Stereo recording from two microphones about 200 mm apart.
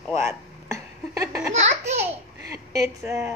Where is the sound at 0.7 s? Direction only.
15° right (ahead or behind).